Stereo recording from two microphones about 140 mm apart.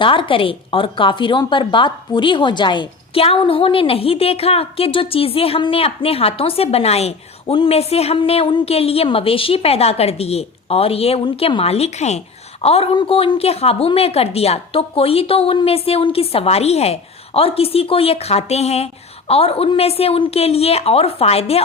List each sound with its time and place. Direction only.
0.0 s speech: 35° left (ahead or behind)